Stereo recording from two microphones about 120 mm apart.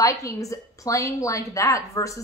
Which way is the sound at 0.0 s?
25° left (ahead or behind).